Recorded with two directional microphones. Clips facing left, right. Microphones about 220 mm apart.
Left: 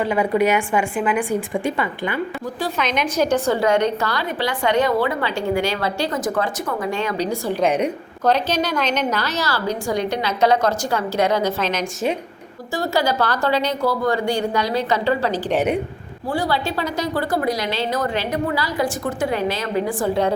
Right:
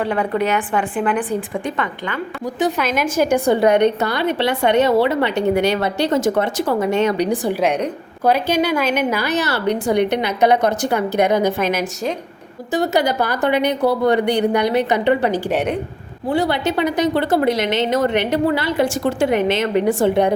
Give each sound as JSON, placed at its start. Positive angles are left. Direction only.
{"t": 0.0, "sound": "a woman's voice", "side_deg": 10}
{"t": 2.6, "sound": "a woman's voice", "side_deg": -20}
{"t": 2.8, "sound": "a woman's voice", "side_deg": -5}
{"t": 7.6, "sound": "a woman's voice", "side_deg": 0}
{"t": 8.2, "sound": "a woman's voice", "side_deg": -10}
{"t": 9.9, "sound": "a woman's voice", "side_deg": -65}
{"t": 10.2, "sound": "a woman's voice", "side_deg": -20}
{"t": 15.4, "sound": "a woman's voice", "side_deg": 5}
{"t": 16.2, "sound": "a woman's voice", "side_deg": -20}